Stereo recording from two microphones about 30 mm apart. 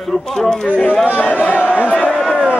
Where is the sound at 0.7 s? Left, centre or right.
Left.